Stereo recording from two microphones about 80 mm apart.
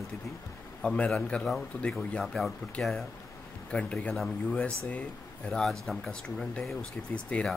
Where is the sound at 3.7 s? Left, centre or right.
Centre.